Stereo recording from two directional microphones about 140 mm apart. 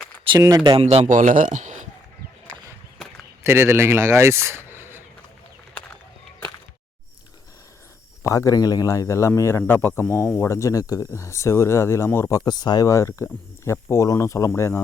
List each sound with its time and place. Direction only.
0.3 s speech: 25° right (ahead or behind)
0.7 s a man's voice: 50° right (ahead or behind)
3.4 s speech: 20° right (ahead or behind)
8.2 s speech: 25° left (ahead or behind)
12.5 s speech: 30° left (ahead or behind)